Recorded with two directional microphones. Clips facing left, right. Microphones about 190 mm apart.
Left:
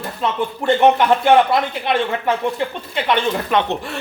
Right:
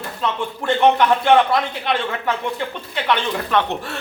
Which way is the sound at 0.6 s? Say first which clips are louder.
Left 4 dB; 15° left (ahead or behind).